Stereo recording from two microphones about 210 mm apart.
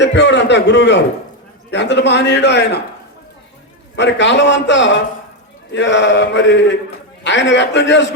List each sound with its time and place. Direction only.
0.0 s a man's voice: 55° left (ahead or behind)
3.9 s a man's voice: 55° left (ahead or behind)